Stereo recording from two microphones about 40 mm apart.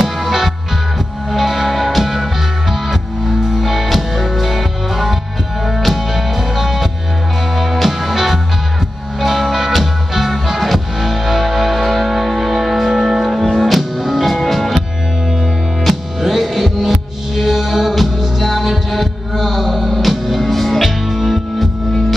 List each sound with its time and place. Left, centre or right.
0.0 s music: centre
15.8 s music: centre